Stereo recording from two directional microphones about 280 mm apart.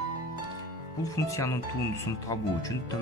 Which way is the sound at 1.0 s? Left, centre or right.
Centre.